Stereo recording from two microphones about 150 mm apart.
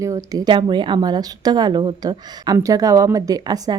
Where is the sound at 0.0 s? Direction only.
20° right (ahead or behind).